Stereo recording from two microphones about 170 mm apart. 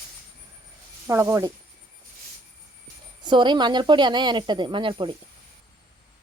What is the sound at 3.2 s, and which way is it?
Speech, 25° right (ahead or behind).